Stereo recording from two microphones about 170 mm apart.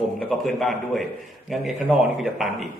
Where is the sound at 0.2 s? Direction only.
Centre (ahead or behind).